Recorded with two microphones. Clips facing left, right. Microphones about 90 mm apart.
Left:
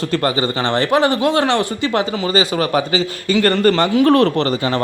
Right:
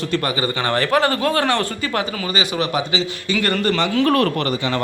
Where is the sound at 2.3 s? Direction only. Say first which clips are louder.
Left 5 dB; 40° left (ahead or behind).